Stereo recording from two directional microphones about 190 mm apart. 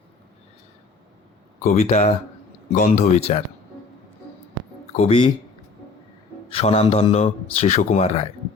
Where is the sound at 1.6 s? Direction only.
35° left (ahead or behind).